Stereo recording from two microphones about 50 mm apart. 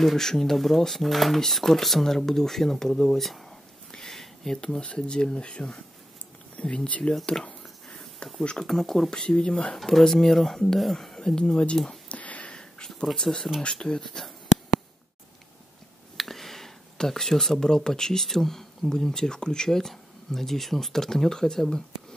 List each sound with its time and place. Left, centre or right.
0.0 s speech: centre
3.9 s a sound: centre
4.6 s speech: centre
7.3 s speech: centre
8.2 s speech: left
8.6 s speech: centre
11.1 s speech: centre
12.1 s a sound: left
12.5 s a sound: centre
13.6 s speech: centre
14.0 s speech: centre
16.2 s speech: centre